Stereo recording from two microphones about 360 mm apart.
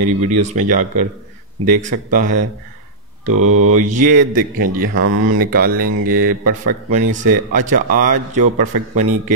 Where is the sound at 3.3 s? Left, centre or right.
Right.